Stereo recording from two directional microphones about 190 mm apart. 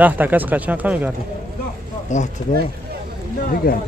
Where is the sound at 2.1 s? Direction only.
40° left (ahead or behind).